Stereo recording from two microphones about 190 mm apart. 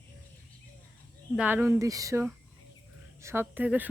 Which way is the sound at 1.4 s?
10° right (ahead or behind).